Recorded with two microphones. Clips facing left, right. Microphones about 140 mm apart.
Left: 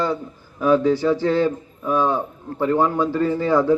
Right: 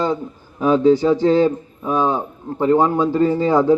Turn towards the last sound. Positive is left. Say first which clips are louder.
# right 3 dB
turn(degrees=-15)  # may be behind; listen again after turning